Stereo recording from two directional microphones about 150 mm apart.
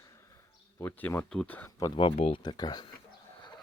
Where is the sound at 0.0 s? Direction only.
20° left (ahead or behind).